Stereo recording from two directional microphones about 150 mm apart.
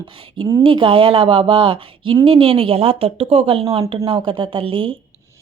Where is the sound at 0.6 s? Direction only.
35° right (ahead or behind).